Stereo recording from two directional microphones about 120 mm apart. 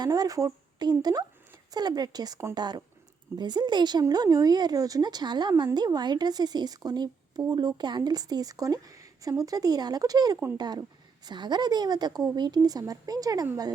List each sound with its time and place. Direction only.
0.0 s speech: 30° right (ahead or behind)